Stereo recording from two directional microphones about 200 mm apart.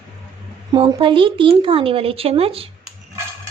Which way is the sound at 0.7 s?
25° right (ahead or behind).